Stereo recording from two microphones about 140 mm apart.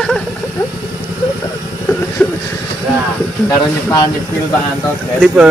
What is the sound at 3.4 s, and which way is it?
Speech, 30° left (ahead or behind).